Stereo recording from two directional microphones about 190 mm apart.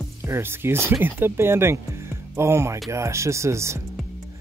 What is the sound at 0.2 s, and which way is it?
Speech, 15° right (ahead or behind).